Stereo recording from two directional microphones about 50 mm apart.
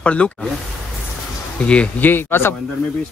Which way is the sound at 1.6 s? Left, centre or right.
Left.